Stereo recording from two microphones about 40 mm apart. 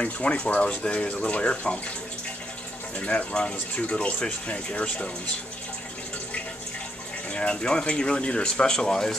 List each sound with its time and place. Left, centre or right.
0.0 s speech: left
3.0 s speech: left
7.2 s speech: left